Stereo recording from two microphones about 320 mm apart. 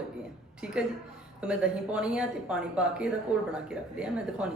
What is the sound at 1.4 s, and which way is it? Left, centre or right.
Speech, centre.